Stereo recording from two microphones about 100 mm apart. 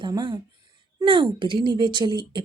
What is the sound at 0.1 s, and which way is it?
Speech, 50° right (ahead or behind).